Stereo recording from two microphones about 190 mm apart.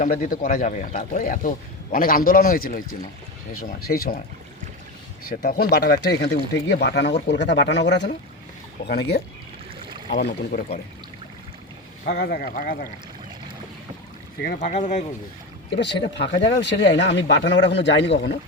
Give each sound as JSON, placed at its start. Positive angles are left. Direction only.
{"t": 0.0, "sound": "speech", "side_deg": 45}
{"t": 5.3, "sound": "speech", "side_deg": 50}
{"t": 12.0, "sound": "speech", "side_deg": 55}
{"t": 14.4, "sound": "speech", "side_deg": 45}
{"t": 15.7, "sound": "speech", "side_deg": 65}